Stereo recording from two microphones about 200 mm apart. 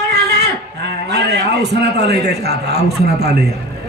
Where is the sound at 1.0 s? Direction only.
55° right (ahead or behind).